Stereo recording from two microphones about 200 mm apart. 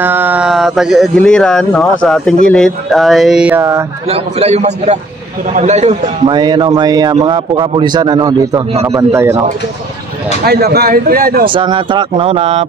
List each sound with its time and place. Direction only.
0.0 s speech: 10° right (ahead or behind)
4.1 s a man's voice: 30° right (ahead or behind)
6.2 s a man's voice: 20° right (ahead or behind)
10.4 s a man's voice: 50° right (ahead or behind)
11.4 s a man's voice: 25° right (ahead or behind)